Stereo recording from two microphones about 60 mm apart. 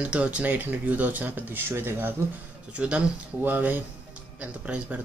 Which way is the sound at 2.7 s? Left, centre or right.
Right.